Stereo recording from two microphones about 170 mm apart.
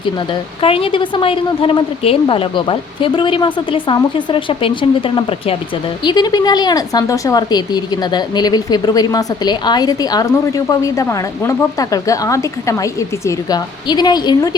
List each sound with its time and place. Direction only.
0.6 s a woman's voice: 30° left (ahead or behind)